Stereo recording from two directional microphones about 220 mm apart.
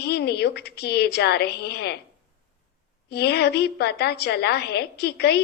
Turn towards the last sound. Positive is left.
turn(degrees=50)  # may be behind; listen again after turning